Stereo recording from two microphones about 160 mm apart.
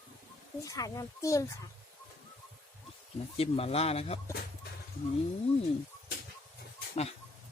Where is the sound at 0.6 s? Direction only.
20° left (ahead or behind).